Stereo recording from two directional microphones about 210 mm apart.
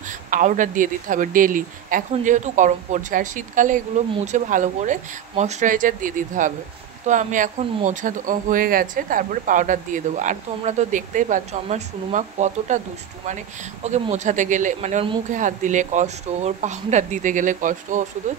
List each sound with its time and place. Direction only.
0.3 s speech: 40° right (ahead or behind)
13.8 s speech: 35° right (ahead or behind)